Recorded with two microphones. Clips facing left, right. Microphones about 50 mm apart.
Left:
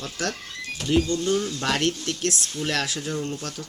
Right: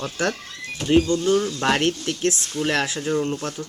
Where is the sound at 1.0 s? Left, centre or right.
Centre.